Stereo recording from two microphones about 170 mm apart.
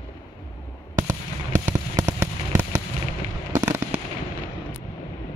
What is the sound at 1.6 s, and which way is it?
Fireworks, 15° right (ahead or behind).